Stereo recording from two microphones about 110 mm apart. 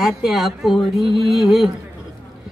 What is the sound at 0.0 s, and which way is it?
Speech, centre (ahead or behind).